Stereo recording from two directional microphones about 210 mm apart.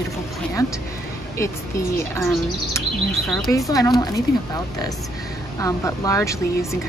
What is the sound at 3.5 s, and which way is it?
A woman's voice, 10° left (ahead or behind).